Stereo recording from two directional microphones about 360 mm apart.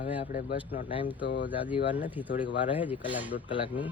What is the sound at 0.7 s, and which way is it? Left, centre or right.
Speech, centre.